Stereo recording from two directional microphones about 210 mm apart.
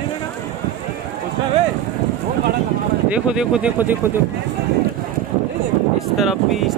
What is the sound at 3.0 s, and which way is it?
Speech, 5° right (ahead or behind).